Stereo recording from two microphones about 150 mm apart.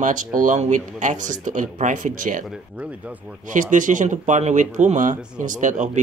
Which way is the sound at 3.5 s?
60° right (ahead or behind).